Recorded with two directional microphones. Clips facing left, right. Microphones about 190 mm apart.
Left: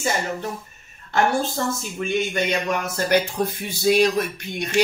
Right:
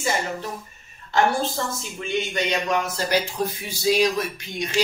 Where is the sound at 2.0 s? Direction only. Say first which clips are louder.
Left 2 dB; 50° left (ahead or behind).